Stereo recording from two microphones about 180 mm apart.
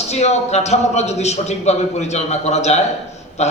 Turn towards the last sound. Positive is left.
turn(degrees=40)  # may be behind; listen again after turning